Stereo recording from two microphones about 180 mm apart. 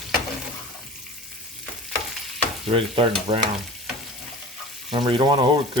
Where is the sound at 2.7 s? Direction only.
30° right (ahead or behind).